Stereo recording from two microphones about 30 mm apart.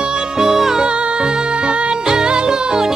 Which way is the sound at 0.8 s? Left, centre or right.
Right.